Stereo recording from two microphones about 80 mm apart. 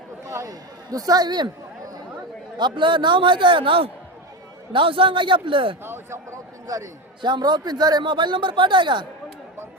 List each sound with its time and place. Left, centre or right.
0.3 s a man's voice: right
2.6 s a man's voice: right
5.8 s a man's voice: right
6.7 s a man's voice: right
7.2 s speech: right